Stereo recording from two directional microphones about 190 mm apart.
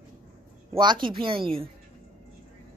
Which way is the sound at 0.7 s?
25° right (ahead or behind).